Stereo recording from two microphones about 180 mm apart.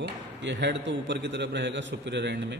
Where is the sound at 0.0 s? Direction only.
80° right.